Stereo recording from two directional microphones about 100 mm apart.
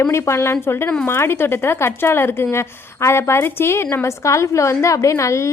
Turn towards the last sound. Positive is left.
turn(degrees=30)  # may be behind; listen again after turning